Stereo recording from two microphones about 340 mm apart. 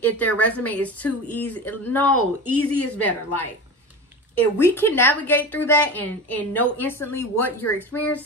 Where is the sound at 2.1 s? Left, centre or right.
Left.